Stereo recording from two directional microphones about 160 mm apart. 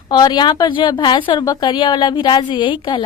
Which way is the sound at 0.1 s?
25° left (ahead or behind).